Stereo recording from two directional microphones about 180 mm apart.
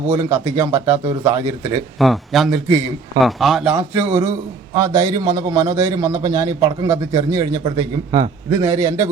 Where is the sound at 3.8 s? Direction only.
10° right (ahead or behind).